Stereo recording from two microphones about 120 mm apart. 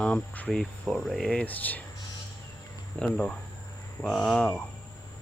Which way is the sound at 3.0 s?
5° left (ahead or behind).